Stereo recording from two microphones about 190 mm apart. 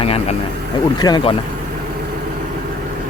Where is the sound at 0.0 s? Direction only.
30° left (ahead or behind).